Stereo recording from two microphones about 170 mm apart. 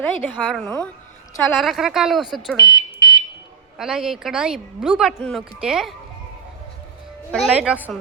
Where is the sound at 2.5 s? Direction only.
20° left (ahead or behind).